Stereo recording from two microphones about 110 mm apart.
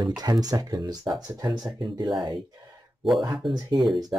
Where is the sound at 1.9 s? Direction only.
45° right (ahead or behind).